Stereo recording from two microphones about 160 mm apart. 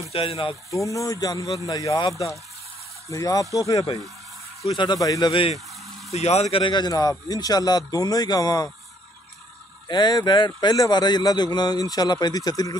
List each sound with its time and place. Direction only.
0.1 s speech: 35° left (ahead or behind)
0.8 s speech: 20° left (ahead or behind)
5.3 s speech: 35° left (ahead or behind)
9.8 s speech: 25° left (ahead or behind)